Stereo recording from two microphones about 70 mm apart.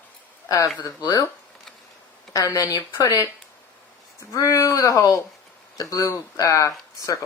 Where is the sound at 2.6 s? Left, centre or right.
Left.